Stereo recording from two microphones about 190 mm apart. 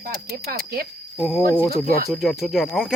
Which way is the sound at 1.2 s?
Centre (ahead or behind).